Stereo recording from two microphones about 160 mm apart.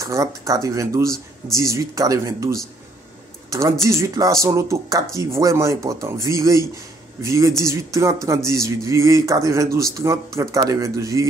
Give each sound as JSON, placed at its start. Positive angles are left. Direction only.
{"t": 0.0, "sound": "speech", "side_deg": -20}